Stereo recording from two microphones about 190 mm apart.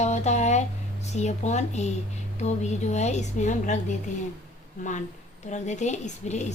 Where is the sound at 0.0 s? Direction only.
35° left (ahead or behind).